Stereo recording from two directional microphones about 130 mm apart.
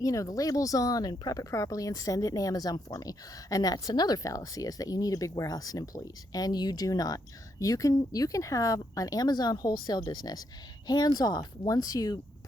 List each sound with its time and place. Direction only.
0.0 s a woman's voice: 25° left (ahead or behind)